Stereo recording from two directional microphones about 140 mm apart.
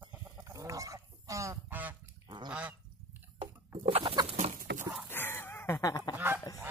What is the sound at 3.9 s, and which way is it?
Chicken, 45° right (ahead or behind).